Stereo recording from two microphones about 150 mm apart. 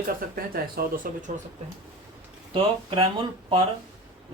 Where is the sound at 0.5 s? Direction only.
75° right (ahead or behind).